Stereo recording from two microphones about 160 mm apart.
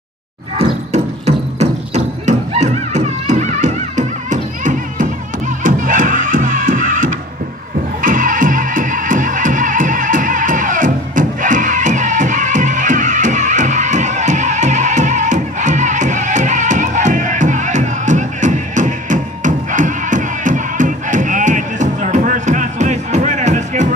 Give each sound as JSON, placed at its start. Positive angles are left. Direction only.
{"t": 0.6, "sound": "music", "side_deg": -45}